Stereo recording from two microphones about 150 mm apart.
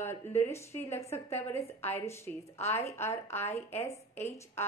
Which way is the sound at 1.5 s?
45° left (ahead or behind).